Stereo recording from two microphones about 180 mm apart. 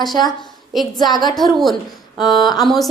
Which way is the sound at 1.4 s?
Centre (ahead or behind).